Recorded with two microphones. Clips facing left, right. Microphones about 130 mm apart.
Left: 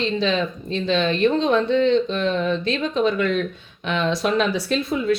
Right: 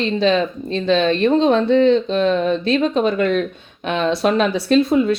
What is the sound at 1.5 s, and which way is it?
Speech, 40° right (ahead or behind).